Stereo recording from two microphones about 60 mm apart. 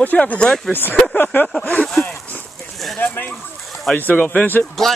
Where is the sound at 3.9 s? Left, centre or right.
Left.